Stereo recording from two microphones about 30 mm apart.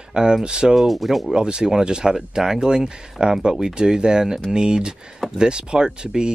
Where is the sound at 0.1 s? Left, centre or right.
Right.